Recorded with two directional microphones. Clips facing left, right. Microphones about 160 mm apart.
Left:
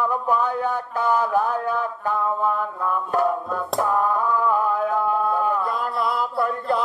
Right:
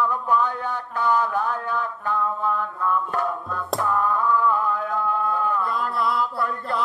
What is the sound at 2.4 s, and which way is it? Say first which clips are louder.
Music: left 2 dB; 30° left (ahead or behind).